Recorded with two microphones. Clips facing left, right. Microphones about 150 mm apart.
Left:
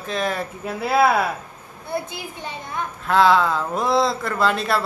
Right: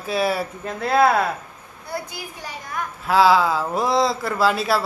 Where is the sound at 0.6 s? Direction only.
5° left (ahead or behind).